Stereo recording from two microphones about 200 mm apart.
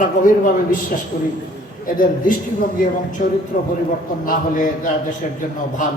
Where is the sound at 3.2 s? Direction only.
40° left (ahead or behind).